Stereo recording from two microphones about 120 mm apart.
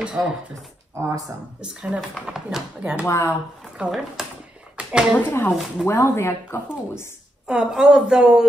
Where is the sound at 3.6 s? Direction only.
5° right (ahead or behind).